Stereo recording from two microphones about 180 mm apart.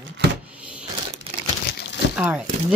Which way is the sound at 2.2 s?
10° right (ahead or behind).